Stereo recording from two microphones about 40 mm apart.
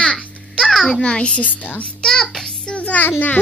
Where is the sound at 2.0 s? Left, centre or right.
Centre.